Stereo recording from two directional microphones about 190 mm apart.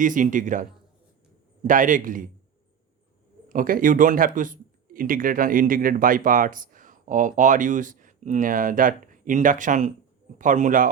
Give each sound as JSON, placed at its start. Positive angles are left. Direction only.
{"t": 0.0, "sound": "speech", "side_deg": -45}
{"t": 3.5, "sound": "speech", "side_deg": -45}